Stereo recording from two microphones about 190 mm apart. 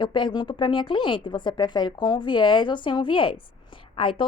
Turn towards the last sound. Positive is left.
turn(degrees=25)  # may be behind; listen again after turning